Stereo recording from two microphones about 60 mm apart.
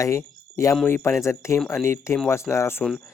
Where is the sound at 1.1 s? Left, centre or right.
Left.